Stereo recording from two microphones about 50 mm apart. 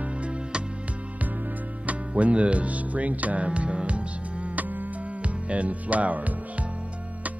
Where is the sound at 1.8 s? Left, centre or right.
Right.